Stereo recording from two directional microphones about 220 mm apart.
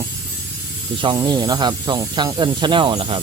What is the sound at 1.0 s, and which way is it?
Speech, 20° right (ahead or behind).